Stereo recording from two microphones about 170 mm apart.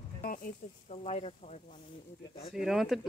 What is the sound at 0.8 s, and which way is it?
Speech, 40° left (ahead or behind).